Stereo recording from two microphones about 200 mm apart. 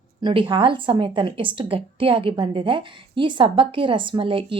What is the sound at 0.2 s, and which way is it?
A woman's voice, 25° right (ahead or behind).